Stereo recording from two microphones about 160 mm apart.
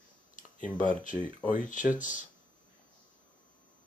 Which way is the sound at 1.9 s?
55° left (ahead or behind).